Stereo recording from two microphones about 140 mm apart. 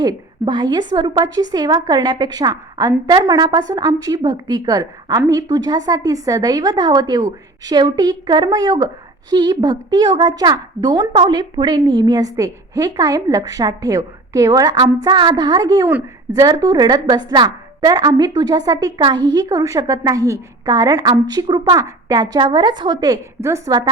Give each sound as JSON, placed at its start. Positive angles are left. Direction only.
{"t": 0.0, "sound": "a woman's voice", "side_deg": -30}